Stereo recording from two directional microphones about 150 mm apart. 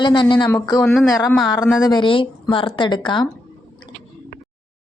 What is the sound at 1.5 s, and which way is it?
Speech, 25° left (ahead or behind).